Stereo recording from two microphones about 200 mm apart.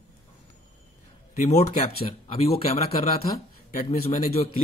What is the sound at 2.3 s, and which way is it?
Speech, 30° left (ahead or behind).